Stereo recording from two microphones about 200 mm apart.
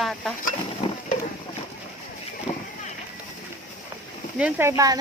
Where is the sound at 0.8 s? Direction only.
25° left (ahead or behind).